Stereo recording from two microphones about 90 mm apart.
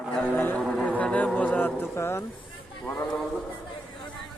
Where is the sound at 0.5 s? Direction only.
5° left (ahead or behind).